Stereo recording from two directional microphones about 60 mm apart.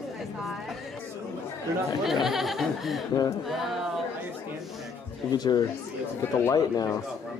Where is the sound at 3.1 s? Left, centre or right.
Left.